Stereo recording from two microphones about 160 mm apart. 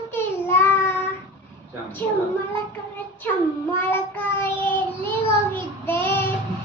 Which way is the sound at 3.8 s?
10° left (ahead or behind).